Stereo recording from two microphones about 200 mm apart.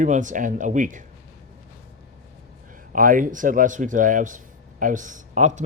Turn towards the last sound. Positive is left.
turn(degrees=-40)  # may be behind; listen again after turning